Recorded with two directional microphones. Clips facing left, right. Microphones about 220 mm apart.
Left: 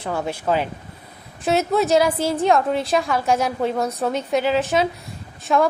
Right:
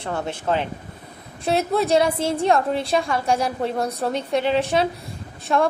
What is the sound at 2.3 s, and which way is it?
A woman's voice, centre (ahead or behind).